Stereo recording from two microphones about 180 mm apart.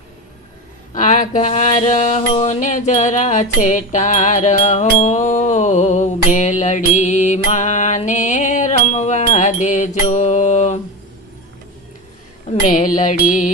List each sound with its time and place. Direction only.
0.9 s mantra: 45° left (ahead or behind)
12.5 s a woman's voice: 45° left (ahead or behind)